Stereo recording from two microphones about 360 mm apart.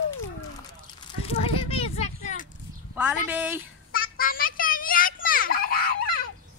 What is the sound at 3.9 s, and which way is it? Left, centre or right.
Children playing, left.